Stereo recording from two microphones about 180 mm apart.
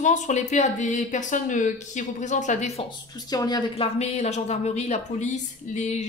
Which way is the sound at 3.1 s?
20° left (ahead or behind).